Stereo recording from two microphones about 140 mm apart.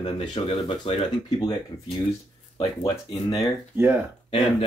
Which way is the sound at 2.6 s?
30° left (ahead or behind).